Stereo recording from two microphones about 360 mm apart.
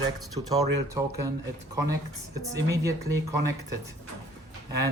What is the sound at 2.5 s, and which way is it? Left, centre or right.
Speech, centre.